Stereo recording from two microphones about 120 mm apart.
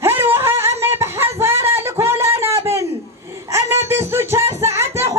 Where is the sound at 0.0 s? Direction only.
20° right (ahead or behind).